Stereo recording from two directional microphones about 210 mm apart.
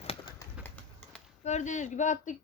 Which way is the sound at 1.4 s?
35° left (ahead or behind).